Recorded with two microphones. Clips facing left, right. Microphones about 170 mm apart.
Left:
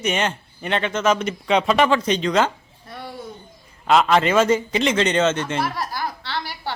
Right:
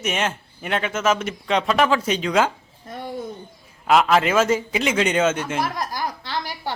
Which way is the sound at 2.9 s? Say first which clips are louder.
Right 3 dB; 20° right (ahead or behind).